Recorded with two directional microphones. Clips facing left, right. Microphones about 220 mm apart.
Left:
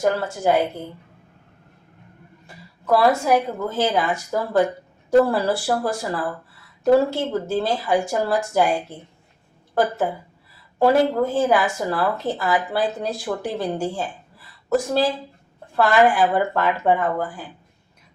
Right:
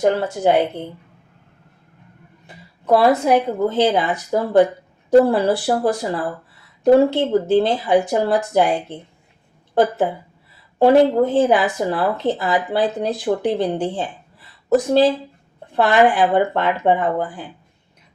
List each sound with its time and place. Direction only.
0.0 s speech: 25° right (ahead or behind)
2.8 s speech: 20° right (ahead or behind)
10.8 s speech: 25° right (ahead or behind)